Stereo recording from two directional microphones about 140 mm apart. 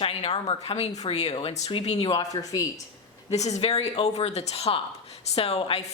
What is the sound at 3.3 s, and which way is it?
Speech, 55° left (ahead or behind).